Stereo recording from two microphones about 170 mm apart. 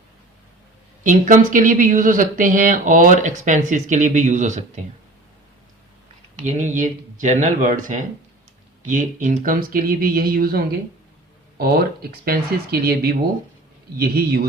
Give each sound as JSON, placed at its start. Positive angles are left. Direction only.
{"t": 1.0, "sound": "speech", "side_deg": -50}
{"t": 6.3, "sound": "a man's voice", "side_deg": -45}